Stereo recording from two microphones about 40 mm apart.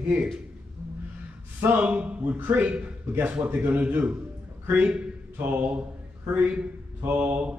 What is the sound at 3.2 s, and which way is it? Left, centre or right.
Speech, right.